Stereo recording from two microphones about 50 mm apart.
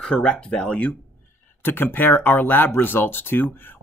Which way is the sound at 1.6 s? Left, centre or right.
Left.